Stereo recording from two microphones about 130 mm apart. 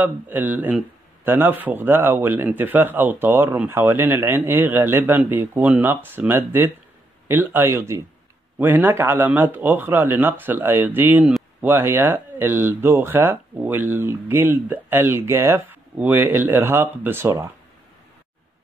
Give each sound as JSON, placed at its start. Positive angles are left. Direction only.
{"t": 0.0, "sound": "a man's voice", "side_deg": -15}